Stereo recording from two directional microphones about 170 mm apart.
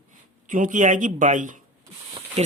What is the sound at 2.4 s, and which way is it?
Speech, 40° right (ahead or behind).